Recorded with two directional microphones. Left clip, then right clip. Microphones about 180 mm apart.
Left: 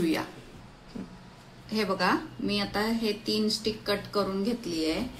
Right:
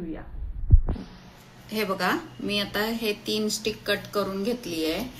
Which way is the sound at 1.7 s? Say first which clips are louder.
Right 1 dB; 25° left (ahead or behind).